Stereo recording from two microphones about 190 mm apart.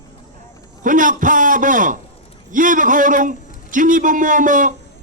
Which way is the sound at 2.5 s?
45° right (ahead or behind).